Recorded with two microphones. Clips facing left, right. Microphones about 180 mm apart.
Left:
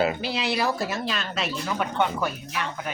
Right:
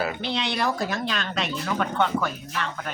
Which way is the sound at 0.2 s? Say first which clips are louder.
Left 1 dB; 5° left (ahead or behind).